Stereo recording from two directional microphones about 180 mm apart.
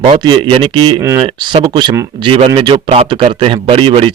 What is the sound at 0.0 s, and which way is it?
A man's voice, 25° right (ahead or behind).